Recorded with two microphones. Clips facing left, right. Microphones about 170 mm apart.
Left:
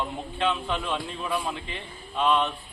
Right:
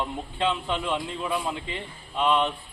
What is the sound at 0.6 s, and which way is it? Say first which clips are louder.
Speech: right 1 dB; 15° right (ahead or behind).